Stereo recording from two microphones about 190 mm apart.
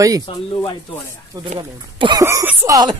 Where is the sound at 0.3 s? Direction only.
30° left (ahead or behind).